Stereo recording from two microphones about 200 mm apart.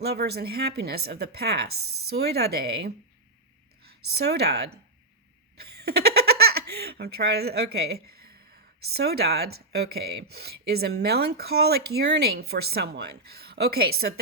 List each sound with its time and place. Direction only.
0.0 s speech: 55° right (ahead or behind)
4.1 s speech: 55° right (ahead or behind)
5.5 s giggle: 50° right (ahead or behind)
8.8 s speech: 55° right (ahead or behind)